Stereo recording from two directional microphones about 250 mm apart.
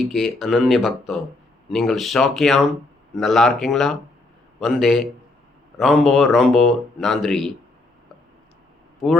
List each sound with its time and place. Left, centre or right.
0.0 s speech: centre